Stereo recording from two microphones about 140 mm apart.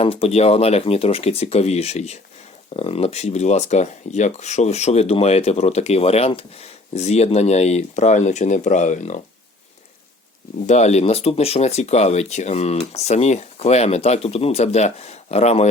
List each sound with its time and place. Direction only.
0.0 s speech: 40° left (ahead or behind); by 9.2 s 55° left (ahead or behind)
10.7 s speech: 55° left (ahead or behind)